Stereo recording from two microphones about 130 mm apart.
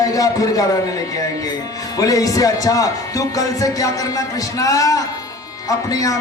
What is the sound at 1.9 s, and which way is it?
Speech, 25° left (ahead or behind).